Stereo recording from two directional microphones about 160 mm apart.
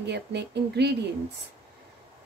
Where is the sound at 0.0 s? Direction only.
90° right.